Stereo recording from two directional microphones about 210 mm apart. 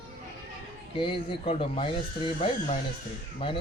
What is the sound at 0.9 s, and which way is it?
Speech, 25° left (ahead or behind).